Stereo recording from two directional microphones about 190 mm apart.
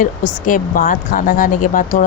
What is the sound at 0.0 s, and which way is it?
Speech, 45° left (ahead or behind).